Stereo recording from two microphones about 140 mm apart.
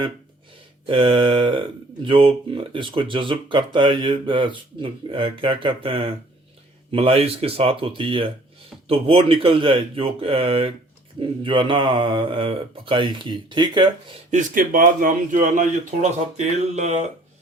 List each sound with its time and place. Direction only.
0.9 s speech: 40° right (ahead or behind)
14.3 s speech: 70° right (ahead or behind); by 17.1 s 50° right (ahead or behind)